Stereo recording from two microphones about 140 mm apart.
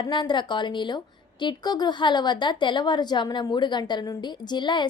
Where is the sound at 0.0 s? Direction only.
35° left (ahead or behind).